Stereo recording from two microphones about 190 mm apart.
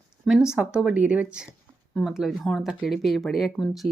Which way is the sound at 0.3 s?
5° right (ahead or behind).